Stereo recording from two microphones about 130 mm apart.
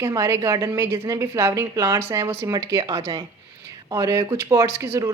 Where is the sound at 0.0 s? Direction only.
25° right (ahead or behind).